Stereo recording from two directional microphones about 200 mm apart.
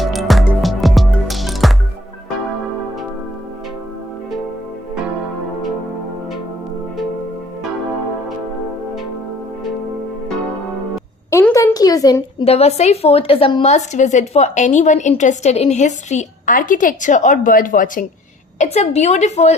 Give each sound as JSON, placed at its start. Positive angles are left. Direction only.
{"t": 0.0, "sound": "music", "side_deg": 0}
{"t": 11.3, "sound": "a sound", "side_deg": 15}
{"t": 12.5, "sound": "a woman's voice", "side_deg": 30}